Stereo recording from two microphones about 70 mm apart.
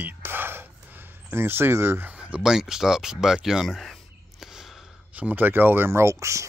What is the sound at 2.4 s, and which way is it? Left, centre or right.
Speech, centre.